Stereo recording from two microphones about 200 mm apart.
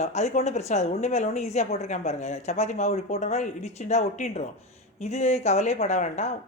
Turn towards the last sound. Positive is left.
turn(degrees=35)  # may be behind; listen again after turning